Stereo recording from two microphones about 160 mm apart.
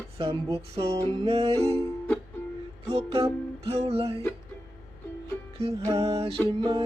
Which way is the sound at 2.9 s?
35° right (ahead or behind).